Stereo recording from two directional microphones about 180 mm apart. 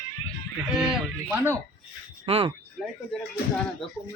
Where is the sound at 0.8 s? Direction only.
10° right (ahead or behind).